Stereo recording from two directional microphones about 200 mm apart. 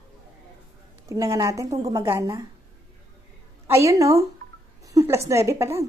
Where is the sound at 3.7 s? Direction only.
15° right (ahead or behind).